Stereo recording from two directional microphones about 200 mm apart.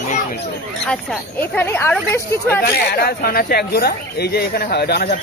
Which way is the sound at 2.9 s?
50° left (ahead or behind).